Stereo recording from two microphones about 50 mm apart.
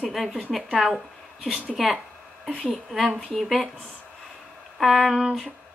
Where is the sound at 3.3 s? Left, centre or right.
Centre.